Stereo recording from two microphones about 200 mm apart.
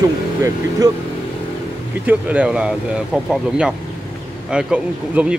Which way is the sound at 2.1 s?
5° right (ahead or behind).